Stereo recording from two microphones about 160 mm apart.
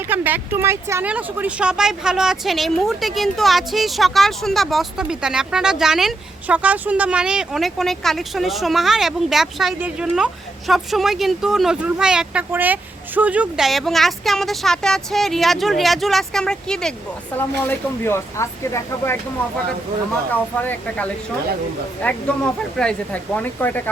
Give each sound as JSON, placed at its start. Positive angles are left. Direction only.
{"t": 0.1, "sound": "speech", "side_deg": -10}
{"t": 20.3, "sound": "speech", "side_deg": 10}